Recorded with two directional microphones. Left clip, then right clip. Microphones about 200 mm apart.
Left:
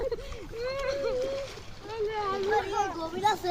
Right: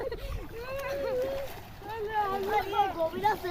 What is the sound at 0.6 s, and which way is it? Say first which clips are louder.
Splash: left 3 dB; 55° right (ahead or behind).